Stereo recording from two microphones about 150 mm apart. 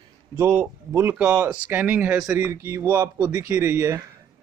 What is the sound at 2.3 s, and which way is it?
Speech, 20° right (ahead or behind).